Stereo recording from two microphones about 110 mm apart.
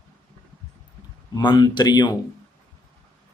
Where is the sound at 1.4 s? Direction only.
40° left (ahead or behind).